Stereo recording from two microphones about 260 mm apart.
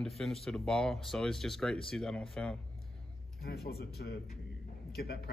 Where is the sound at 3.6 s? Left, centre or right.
Left.